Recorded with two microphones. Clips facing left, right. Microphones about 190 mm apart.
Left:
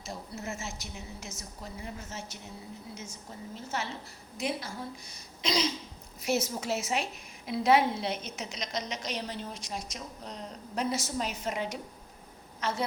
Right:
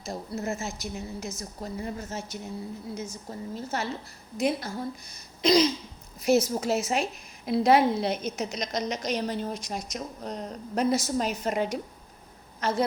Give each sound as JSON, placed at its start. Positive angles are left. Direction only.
{"t": 0.0, "sound": "a woman's voice", "side_deg": -40}
{"t": 5.4, "sound": "throat clearing", "side_deg": -45}
{"t": 6.2, "sound": "a woman's voice", "side_deg": -40}